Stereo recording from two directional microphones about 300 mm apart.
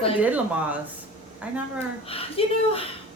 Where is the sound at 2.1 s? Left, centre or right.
Centre.